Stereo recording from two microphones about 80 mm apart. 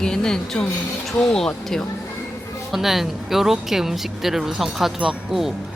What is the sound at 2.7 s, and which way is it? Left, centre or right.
Speech, centre.